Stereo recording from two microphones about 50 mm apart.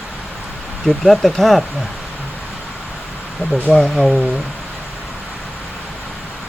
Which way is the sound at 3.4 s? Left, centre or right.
Left.